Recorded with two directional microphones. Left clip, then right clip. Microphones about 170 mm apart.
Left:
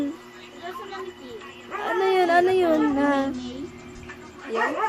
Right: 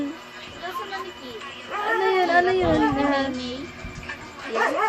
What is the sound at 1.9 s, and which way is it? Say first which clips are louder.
Speech: even; 55° left (ahead or behind).